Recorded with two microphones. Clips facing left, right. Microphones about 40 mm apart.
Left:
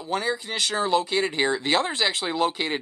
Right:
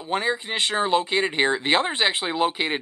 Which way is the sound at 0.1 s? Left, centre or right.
Right.